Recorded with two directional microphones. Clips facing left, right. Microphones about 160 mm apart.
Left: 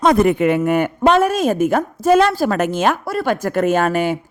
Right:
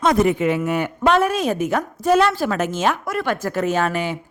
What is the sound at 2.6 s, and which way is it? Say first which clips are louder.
Speech: left 3 dB; 55° left (ahead or behind).